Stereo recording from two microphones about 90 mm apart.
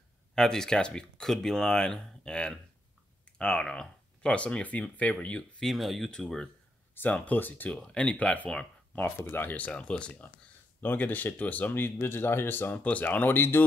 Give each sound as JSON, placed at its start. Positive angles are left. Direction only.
{"t": 0.3, "sound": "speech", "side_deg": 5}
{"t": 7.7, "sound": "speech", "side_deg": 10}